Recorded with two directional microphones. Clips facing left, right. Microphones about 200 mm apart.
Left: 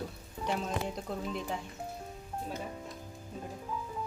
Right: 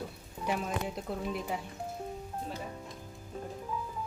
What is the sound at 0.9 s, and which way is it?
Speech, 5° right (ahead or behind).